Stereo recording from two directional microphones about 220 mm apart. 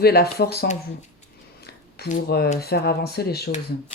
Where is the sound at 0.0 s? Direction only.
45° left (ahead or behind).